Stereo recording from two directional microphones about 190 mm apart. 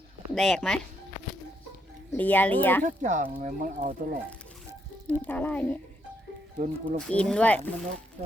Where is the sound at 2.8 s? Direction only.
40° right (ahead or behind).